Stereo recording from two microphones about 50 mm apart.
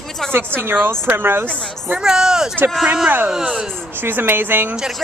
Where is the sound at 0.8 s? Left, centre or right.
Right.